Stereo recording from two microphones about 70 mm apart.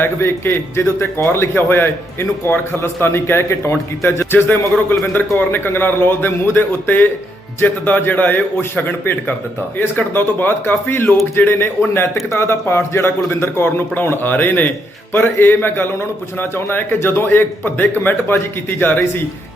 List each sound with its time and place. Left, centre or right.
0.0 s a man's voice: left